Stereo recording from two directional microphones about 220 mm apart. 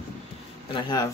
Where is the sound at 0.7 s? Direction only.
15° left (ahead or behind).